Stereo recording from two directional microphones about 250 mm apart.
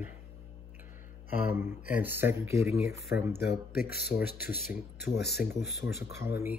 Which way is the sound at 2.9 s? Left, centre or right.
Left.